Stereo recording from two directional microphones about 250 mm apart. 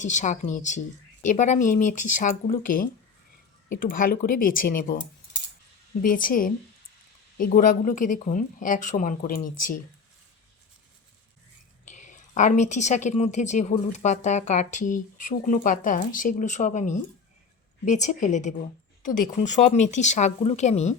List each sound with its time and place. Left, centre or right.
0.0 s a woman's voice: left
11.9 s a woman's voice: left